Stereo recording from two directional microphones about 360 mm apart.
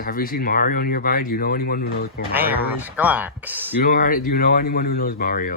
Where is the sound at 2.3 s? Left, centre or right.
Centre.